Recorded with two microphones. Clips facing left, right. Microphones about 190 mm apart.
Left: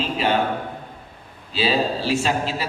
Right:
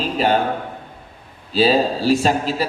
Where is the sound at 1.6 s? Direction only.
40° right (ahead or behind).